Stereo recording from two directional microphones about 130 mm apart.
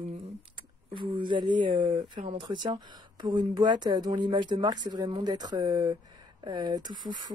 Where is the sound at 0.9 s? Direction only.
40° right (ahead or behind).